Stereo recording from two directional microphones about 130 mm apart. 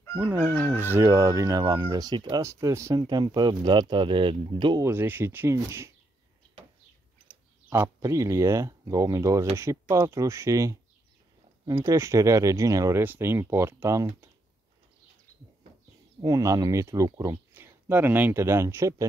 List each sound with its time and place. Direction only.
0.1 s speech: 10° right (ahead or behind); by 4.8 s 35° right (ahead or behind)
4.8 s speech: 15° right (ahead or behind)
7.2 s speech: 20° right (ahead or behind)
11.8 s speech: 25° right (ahead or behind)
16.2 s speech: 25° right (ahead or behind)
17.6 s speech: 15° right (ahead or behind)